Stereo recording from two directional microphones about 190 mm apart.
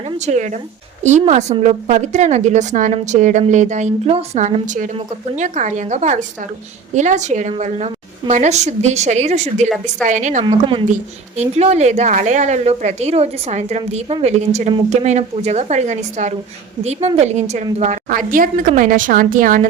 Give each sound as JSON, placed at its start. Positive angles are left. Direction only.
{"t": 0.0, "sound": "a woman's voice", "side_deg": -35}
{"t": 10.4, "sound": "speech", "side_deg": -25}
{"t": 10.8, "sound": "a woman's voice", "side_deg": -40}